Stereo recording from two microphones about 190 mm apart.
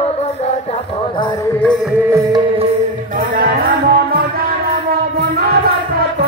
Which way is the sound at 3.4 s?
50° right (ahead or behind).